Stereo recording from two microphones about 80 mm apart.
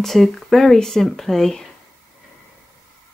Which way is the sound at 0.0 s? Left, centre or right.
Centre.